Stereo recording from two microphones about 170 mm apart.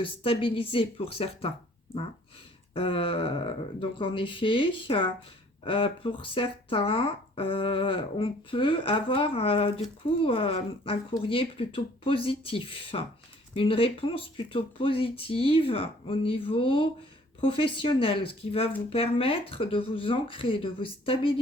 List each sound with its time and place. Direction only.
0.0 s speech: 30° left (ahead or behind)
2.7 s speech: 30° left (ahead or behind)